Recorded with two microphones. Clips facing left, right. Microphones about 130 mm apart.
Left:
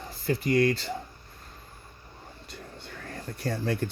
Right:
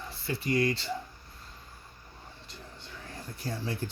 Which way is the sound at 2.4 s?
60° left (ahead or behind).